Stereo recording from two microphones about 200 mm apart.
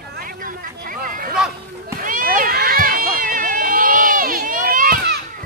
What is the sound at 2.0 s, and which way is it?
Run, 40° right (ahead or behind).